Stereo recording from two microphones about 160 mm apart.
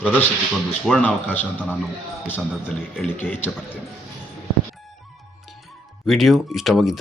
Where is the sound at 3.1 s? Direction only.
10° left (ahead or behind).